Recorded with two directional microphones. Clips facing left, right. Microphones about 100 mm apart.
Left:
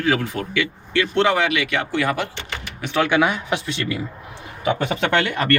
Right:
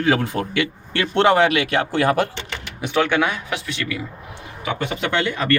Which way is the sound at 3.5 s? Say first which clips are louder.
Left 3 dB; 30° left (ahead or behind).